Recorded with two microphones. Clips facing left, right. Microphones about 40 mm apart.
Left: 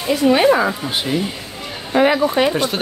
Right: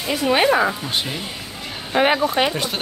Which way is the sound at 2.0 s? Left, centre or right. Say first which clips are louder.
Left 3 dB; right.